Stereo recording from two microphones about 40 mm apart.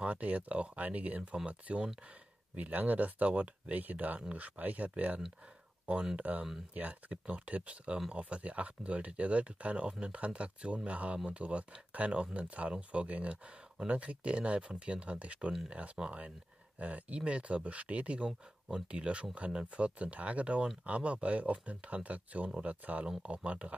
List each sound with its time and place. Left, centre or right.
0.0 s speech: right
2.5 s speech: right
12.4 s speech: right
16.0 s speech: centre
16.7 s speech: right